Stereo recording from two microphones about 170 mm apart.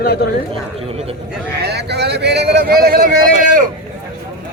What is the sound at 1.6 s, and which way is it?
Speech, 75° right (ahead or behind).